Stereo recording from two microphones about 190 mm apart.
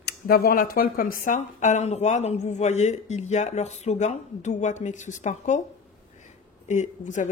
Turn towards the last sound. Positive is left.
turn(degrees=40)  # may be behind; listen again after turning